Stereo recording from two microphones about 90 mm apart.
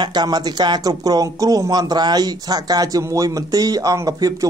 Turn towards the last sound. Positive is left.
turn(degrees=-40)  # may be behind; listen again after turning